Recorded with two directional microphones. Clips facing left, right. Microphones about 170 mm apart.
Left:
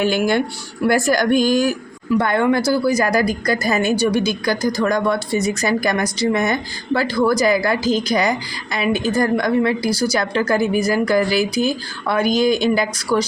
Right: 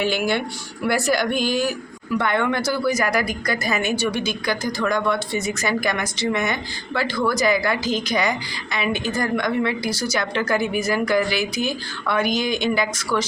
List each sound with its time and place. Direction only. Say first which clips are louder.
0.0 s a woman's voice: left 4 dB; 45° left (ahead or behind)